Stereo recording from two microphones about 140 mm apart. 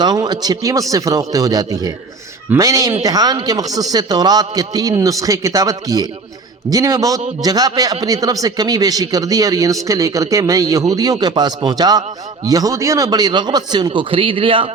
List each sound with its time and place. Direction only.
0.0 s a man's voice: 30° right (ahead or behind)